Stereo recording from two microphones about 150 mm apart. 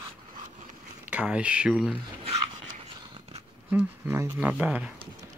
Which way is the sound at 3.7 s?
10° right (ahead or behind).